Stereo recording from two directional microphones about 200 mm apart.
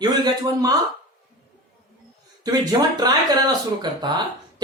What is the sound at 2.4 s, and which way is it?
Speech, 20° right (ahead or behind).